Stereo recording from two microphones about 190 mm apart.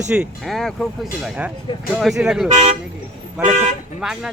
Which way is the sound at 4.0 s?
5° right (ahead or behind).